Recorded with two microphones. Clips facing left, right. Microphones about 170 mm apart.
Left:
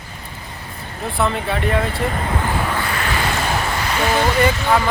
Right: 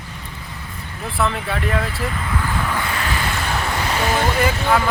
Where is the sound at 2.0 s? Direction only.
40° left (ahead or behind).